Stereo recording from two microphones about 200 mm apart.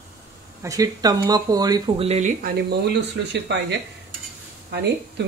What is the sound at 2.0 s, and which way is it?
Speech, 35° right (ahead or behind).